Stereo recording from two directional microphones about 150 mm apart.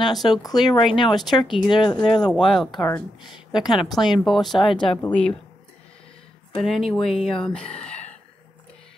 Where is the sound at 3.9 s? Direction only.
Centre (ahead or behind).